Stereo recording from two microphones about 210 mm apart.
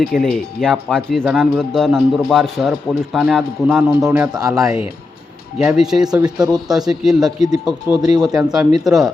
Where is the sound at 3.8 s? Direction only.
15° right (ahead or behind).